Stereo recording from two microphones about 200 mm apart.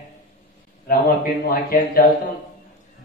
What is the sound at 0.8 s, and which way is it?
Speech, 45° left (ahead or behind).